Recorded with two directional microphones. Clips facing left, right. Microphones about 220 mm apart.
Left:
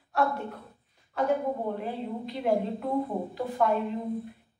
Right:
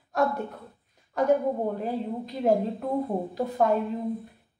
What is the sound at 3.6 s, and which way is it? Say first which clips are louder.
Speech: right 2 dB; 40° right (ahead or behind).